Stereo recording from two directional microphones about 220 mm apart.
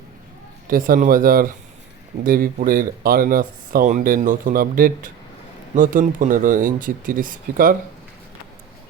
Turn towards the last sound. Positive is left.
turn(degrees=-40)  # may be behind; listen again after turning